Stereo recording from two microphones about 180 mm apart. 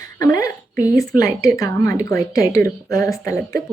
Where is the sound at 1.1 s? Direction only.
20° left (ahead or behind).